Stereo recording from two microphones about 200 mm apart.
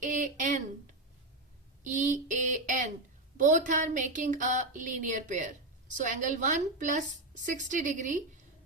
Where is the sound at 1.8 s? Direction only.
40° right (ahead or behind).